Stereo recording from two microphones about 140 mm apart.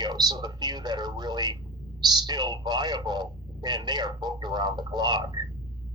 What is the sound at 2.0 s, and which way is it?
A man's voice, 30° right (ahead or behind).